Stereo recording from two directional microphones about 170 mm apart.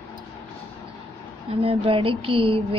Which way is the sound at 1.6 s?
30° right (ahead or behind).